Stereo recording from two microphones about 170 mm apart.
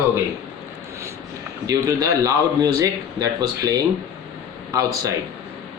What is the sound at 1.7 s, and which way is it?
A man's voice, 20° right (ahead or behind).